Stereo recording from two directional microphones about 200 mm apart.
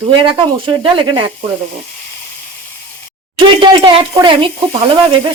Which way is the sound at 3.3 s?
25° right (ahead or behind).